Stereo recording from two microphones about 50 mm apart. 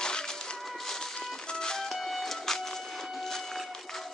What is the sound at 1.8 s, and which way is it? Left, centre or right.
Music, centre.